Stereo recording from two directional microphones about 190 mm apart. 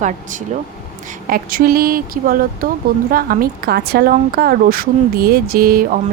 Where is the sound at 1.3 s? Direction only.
50° right (ahead or behind).